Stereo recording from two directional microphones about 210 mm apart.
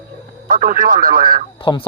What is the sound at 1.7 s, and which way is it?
Speech, 20° left (ahead or behind).